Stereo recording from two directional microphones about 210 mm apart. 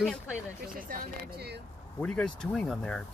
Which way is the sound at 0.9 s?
50° right (ahead or behind).